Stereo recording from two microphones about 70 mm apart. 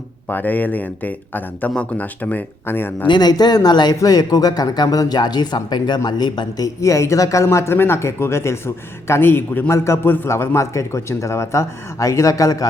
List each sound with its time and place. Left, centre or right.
0.3 s speech: left
3.2 s speech: left
6.8 s speech: left
9.7 s speech: left